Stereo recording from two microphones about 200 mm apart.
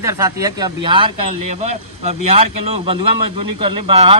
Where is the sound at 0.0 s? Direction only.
15° right (ahead or behind).